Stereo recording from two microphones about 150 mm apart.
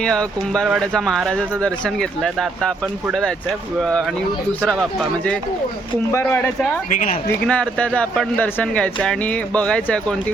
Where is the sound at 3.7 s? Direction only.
5° left (ahead or behind).